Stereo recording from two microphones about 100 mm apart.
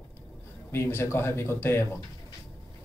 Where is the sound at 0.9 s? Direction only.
25° left (ahead or behind).